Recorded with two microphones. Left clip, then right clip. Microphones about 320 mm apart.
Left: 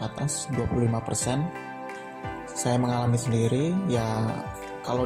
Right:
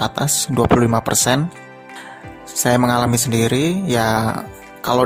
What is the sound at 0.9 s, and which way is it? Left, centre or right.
Speech, right.